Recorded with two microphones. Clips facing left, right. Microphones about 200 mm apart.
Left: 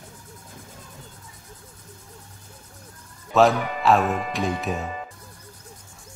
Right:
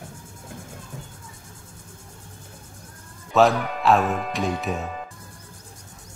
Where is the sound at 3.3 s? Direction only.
Centre (ahead or behind).